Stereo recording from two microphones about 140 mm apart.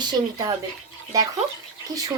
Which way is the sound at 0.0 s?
30° right (ahead or behind).